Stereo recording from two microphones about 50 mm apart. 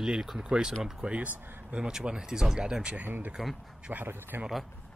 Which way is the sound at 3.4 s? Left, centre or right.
Centre.